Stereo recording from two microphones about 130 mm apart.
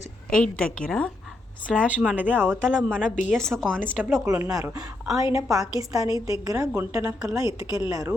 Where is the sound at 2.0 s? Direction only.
10° right (ahead or behind).